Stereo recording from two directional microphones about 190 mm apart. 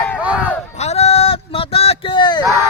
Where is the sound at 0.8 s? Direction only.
35° left (ahead or behind).